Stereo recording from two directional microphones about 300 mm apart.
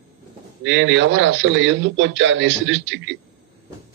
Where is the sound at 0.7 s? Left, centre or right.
Right.